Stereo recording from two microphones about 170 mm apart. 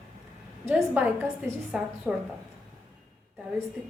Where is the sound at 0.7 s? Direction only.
10° right (ahead or behind).